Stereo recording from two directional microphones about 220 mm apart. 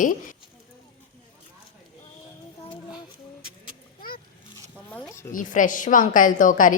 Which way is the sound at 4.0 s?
40° left (ahead or behind).